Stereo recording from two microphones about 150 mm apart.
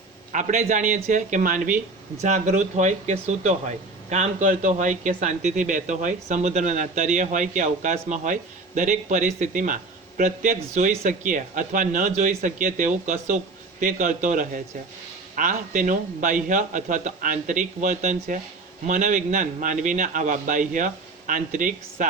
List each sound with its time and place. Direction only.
0.3 s speech: 55° right (ahead or behind)